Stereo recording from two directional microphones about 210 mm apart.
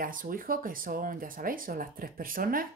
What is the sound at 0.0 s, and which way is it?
Speech, 40° right (ahead or behind).